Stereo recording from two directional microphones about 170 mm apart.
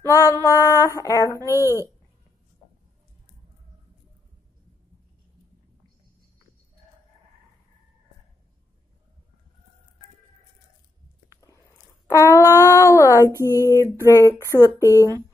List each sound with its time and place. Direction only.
0.0 s female singing: 20° left (ahead or behind)
0.5 s a sound: 20° left (ahead or behind)
11.2 s biting: 20° left (ahead or behind)
12.1 s speech: 20° left (ahead or behind)
13.3 s a sound: 15° right (ahead or behind)
13.6 s speech: 20° left (ahead or behind)